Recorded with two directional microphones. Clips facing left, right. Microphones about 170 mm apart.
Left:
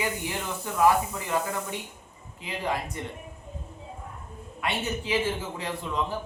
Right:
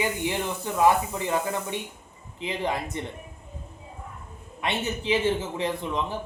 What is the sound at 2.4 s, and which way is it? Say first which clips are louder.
Speech: right 2 dB; 20° right (ahead or behind).